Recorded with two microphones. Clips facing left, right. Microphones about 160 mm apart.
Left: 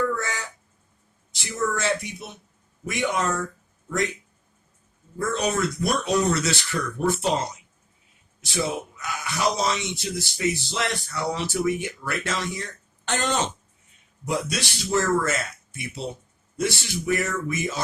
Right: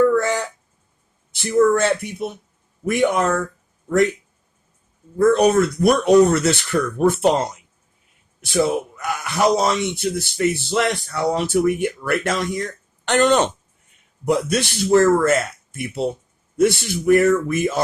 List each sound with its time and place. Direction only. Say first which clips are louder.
1.4 s speech: right 11 dB; 55° right (ahead or behind)
5.1 s speech: right 11 dB; 60° right (ahead or behind)